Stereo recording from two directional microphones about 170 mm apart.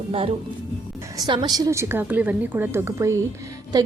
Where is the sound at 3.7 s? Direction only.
25° right (ahead or behind).